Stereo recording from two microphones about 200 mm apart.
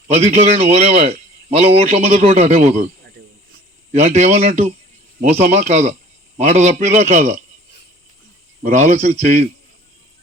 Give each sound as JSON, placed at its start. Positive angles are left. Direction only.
{"t": 0.1, "sound": "a man's voice", "side_deg": -35}
{"t": 8.6, "sound": "a man's voice", "side_deg": -35}